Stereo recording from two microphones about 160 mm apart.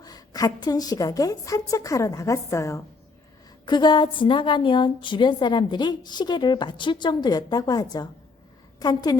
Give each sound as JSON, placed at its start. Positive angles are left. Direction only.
{"t": 0.0, "sound": "a woman's voice", "side_deg": 25}